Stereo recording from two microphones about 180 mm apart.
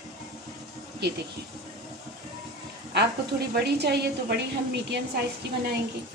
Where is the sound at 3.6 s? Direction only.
65° right (ahead or behind).